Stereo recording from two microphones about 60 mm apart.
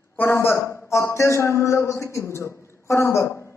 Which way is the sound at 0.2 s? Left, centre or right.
Left.